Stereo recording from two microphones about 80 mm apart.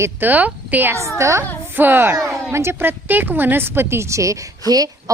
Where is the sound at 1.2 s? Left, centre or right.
Right.